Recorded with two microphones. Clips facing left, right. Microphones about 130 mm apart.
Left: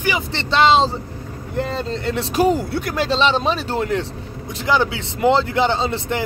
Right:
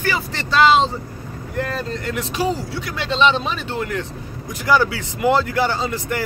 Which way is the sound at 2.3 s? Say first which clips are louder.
Left 6 dB; 50° left (ahead or behind).